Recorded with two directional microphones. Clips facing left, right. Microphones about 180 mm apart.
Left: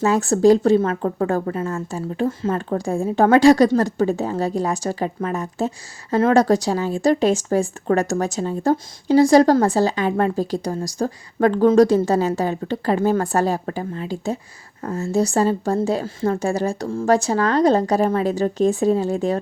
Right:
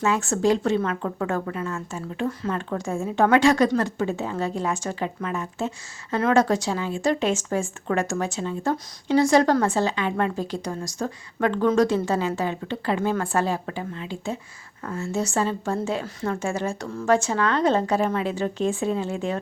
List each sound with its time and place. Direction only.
0.0 s speech: 35° left (ahead or behind)